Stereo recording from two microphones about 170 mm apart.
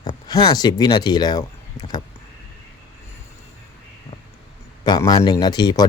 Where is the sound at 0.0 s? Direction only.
25° left (ahead or behind).